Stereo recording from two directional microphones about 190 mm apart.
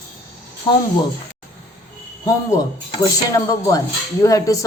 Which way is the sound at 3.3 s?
15° left (ahead or behind).